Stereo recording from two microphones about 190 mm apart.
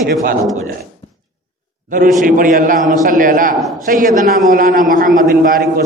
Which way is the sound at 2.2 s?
45° right (ahead or behind).